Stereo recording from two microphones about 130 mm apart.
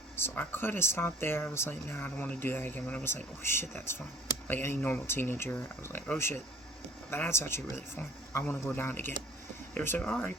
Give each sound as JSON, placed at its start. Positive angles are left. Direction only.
{"t": 0.2, "sound": "speech", "side_deg": 15}